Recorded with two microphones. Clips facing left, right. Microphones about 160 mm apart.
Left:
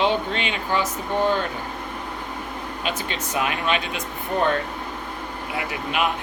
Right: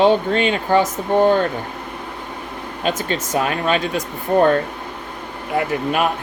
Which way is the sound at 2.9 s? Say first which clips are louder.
Right 8 dB; 45° right (ahead or behind).